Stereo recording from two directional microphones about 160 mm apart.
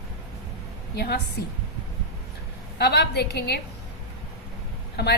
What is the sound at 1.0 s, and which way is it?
Speech, 90° left.